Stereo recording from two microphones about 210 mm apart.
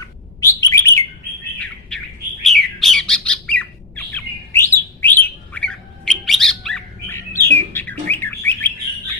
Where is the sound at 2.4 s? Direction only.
Centre (ahead or behind).